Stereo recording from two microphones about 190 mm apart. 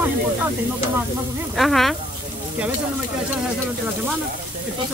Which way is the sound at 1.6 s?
Centre (ahead or behind).